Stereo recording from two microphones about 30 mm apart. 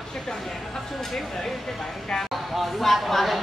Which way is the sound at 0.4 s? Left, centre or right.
Centre.